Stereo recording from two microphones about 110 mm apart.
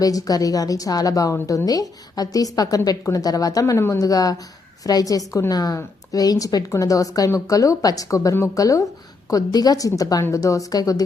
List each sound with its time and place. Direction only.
0.0 s a woman's voice: 35° left (ahead or behind)